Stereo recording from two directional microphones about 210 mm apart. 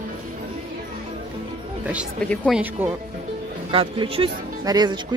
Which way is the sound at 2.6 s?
10° right (ahead or behind).